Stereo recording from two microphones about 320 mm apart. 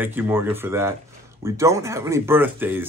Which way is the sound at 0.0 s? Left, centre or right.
Centre.